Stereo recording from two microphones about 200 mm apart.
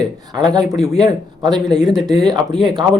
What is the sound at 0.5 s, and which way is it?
A man's voice, 20° right (ahead or behind).